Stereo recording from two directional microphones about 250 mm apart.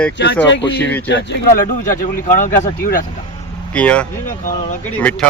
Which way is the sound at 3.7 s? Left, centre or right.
Centre.